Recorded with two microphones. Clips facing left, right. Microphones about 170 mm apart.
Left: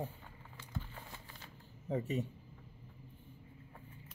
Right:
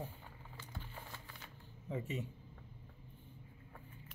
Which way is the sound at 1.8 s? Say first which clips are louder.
Left 5 dB; 40° left (ahead or behind).